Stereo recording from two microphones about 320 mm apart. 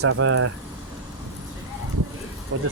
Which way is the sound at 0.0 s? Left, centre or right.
Right.